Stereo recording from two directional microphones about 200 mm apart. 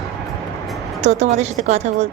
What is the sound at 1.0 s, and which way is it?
A woman's voice, 35° right (ahead or behind).